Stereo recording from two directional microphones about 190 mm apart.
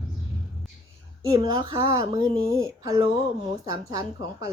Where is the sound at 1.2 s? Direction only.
20° right (ahead or behind).